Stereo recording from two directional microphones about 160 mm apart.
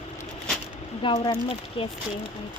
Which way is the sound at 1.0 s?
35° left (ahead or behind).